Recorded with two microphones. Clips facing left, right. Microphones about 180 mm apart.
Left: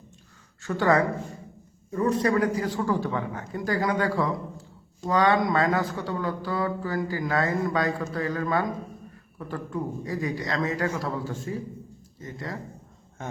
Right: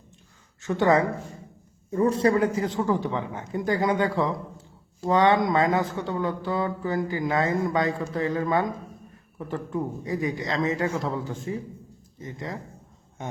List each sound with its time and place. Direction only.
0.6 s speech: 20° right (ahead or behind)